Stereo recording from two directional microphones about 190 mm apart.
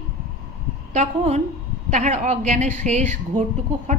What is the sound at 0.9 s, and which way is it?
A woman's voice, 35° right (ahead or behind).